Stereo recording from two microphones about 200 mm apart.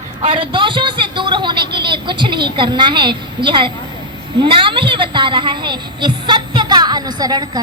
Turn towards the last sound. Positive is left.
turn(degrees=-20)  # may be behind; listen again after turning